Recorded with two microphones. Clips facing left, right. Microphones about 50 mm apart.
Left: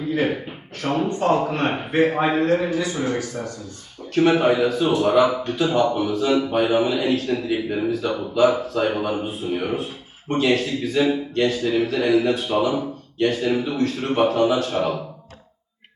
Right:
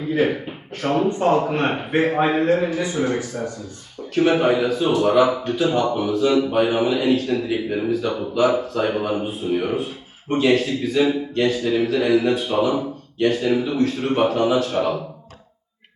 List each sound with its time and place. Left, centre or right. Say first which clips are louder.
0.8 s a man's voice: right 2 dB; right
2.7 s speech: right 1 dB; right
4.1 s speech: even; centre